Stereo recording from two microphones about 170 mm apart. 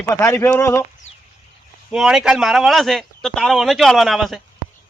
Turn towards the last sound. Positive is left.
turn(degrees=0)  # may be behind; listen again after turning